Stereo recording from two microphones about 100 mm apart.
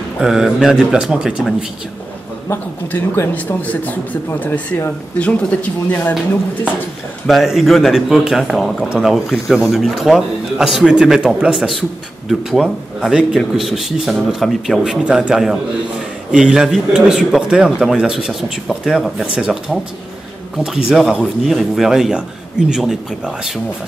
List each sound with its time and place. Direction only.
0.2 s speech: 5° right (ahead or behind)
3.3 s speech: 15° left (ahead or behind)
7.2 s a man's voice: centre (ahead or behind)